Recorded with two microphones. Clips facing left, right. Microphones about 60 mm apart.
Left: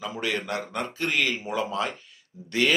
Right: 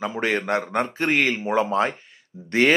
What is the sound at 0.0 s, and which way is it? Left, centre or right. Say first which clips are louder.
Speech: right 6 dB; right.